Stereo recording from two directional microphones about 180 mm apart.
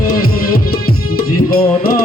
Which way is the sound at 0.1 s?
55° left (ahead or behind).